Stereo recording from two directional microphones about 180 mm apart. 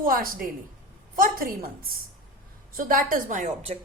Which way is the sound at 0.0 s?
50° right (ahead or behind).